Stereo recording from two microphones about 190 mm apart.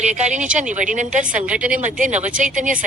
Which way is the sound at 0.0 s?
40° right (ahead or behind).